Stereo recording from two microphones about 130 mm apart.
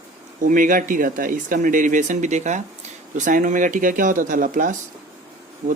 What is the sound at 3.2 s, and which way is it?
Speech, 85° right.